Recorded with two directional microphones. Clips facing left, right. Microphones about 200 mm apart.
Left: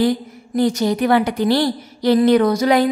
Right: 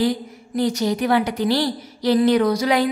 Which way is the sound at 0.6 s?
55° left (ahead or behind).